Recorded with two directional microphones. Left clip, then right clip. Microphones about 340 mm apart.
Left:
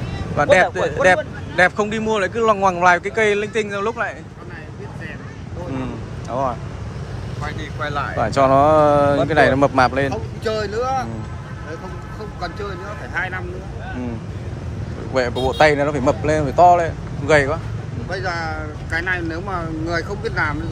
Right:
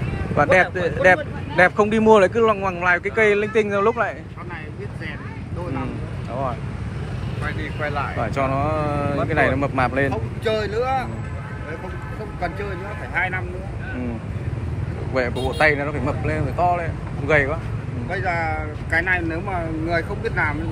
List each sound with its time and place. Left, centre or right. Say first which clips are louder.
0.4 s speech: left 2 dB; centre
7.4 s speech: even; left
8.2 s speech: left 11 dB; centre
10.7 s speech: left 1 dB; centre
15.1 s speech: left 4 dB; centre